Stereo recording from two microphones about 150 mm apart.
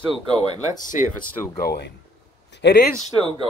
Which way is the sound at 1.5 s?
90° left.